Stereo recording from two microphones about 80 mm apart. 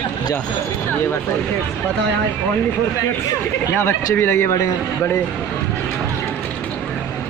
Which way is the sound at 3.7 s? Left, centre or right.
Left.